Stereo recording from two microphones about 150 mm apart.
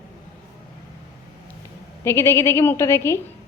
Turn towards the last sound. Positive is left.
turn(degrees=15)  # may be behind; listen again after turning